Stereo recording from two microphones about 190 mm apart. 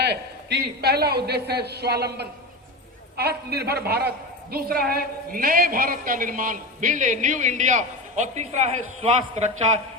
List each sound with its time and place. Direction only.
0.0 s a man's voice: 60° right (ahead or behind); by 9.5 s 35° right (ahead or behind)